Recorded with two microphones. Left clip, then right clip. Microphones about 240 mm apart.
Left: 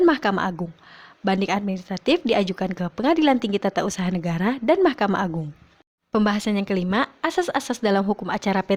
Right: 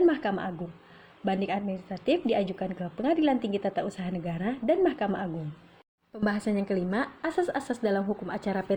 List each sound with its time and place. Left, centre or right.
0.0 s a woman's voice: left